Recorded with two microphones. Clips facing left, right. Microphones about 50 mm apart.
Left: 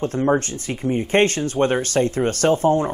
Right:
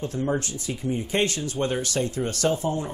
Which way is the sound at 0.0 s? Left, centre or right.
Left.